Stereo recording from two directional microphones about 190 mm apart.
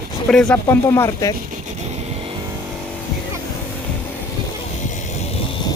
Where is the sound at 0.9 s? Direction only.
15° left (ahead or behind).